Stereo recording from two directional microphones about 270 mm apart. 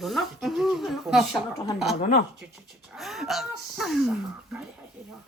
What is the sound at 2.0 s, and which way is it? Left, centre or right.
Speech, left.